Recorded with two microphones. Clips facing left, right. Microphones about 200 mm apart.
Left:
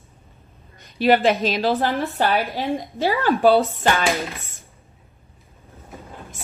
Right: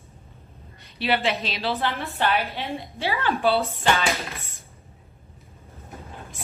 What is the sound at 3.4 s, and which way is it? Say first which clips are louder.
Speech: left 7 dB; 45° left (ahead or behind).